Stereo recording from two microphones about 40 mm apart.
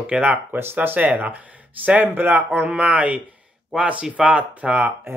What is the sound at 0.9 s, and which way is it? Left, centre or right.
Speech, right.